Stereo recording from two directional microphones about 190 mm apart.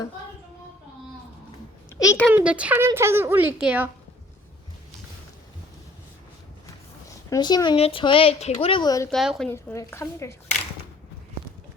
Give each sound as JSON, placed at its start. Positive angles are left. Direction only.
{"t": 1.9, "sound": "a child's voice", "side_deg": 15}
{"t": 2.3, "sound": "a woman's voice", "side_deg": -5}
{"t": 7.3, "sound": "speech", "side_deg": 20}
{"t": 9.0, "sound": "a woman's voice", "side_deg": 0}
{"t": 9.5, "sound": "a woman's voice", "side_deg": 15}